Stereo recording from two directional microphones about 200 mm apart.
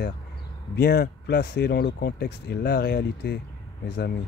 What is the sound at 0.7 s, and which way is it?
Speech, 50° left (ahead or behind).